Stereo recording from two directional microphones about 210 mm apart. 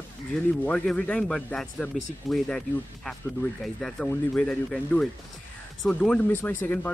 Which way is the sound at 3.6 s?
5° left (ahead or behind).